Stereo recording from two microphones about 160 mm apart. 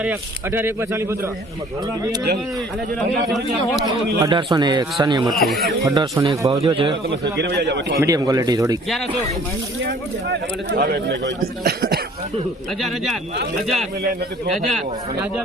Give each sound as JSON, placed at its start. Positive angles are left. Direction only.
{"t": 0.0, "sound": "a man's voice", "side_deg": -10}
{"t": 3.3, "sound": "speech", "side_deg": 0}
{"t": 4.2, "sound": "a man's voice", "side_deg": -30}
{"t": 5.3, "sound": "speech", "side_deg": 0}
{"t": 5.8, "sound": "a man's voice", "side_deg": -25}
{"t": 6.6, "sound": "a man's voice", "side_deg": -35}
{"t": 7.3, "sound": "speech", "side_deg": -90}
{"t": 8.0, "sound": "a man's voice", "side_deg": -20}
{"t": 9.8, "sound": "speech", "side_deg": -90}
{"t": 11.6, "sound": "speech", "side_deg": -75}